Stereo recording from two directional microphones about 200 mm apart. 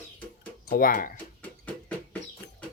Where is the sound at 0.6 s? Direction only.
45° left (ahead or behind).